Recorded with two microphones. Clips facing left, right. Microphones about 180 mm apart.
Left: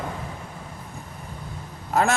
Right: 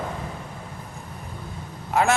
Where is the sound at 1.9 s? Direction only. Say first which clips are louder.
Right 1 dB; 40° left (ahead or behind).